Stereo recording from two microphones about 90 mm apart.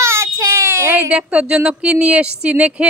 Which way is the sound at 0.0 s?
30° right (ahead or behind).